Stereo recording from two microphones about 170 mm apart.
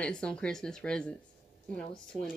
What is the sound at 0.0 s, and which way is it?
Speech, 5° left (ahead or behind).